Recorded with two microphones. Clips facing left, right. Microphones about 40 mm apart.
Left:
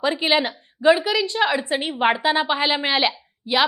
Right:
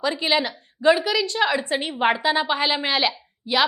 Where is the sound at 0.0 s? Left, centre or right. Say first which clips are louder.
Left 2 dB; left.